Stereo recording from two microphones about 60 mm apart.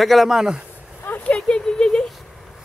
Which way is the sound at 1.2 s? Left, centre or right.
Centre.